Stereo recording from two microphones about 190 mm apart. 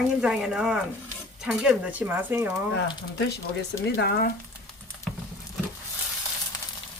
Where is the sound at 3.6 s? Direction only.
60° left (ahead or behind).